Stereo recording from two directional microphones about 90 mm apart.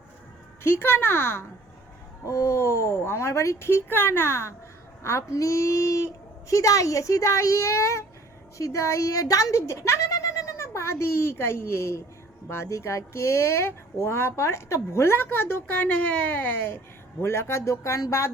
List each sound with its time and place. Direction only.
0.8 s a woman's voice: 25° left (ahead or behind)